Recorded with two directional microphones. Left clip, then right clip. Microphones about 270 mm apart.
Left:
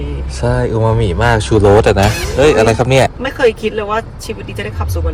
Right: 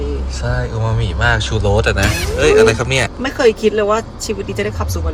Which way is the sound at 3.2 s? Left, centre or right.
Centre.